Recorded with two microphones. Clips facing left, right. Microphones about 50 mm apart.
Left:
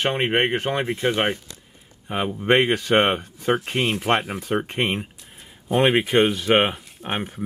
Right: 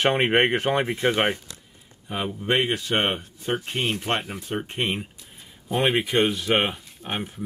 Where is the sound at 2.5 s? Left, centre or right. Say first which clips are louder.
Left 5 dB; left.